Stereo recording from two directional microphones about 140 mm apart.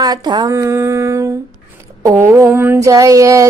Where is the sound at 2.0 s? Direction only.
20° right (ahead or behind).